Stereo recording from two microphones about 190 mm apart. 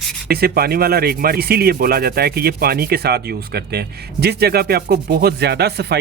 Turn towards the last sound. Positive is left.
turn(degrees=-60)  # may be behind; listen again after turning